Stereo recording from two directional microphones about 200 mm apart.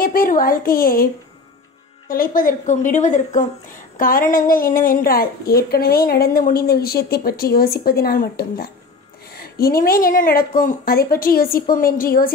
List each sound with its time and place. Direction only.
0.0 s a woman's voice: 45° left (ahead or behind)